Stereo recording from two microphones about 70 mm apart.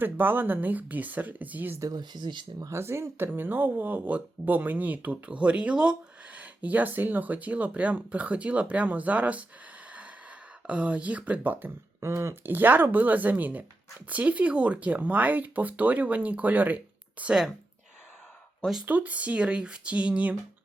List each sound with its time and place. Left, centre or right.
0.0 s speech: right
1.8 s speech: right
2.6 s speech: right
3.2 s speech: right
10.7 s speech: centre
11.9 s speech: right
18.9 s speech: right